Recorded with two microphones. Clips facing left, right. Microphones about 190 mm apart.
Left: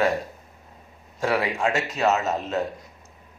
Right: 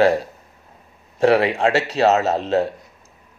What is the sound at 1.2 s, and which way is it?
Speech, 65° right (ahead or behind).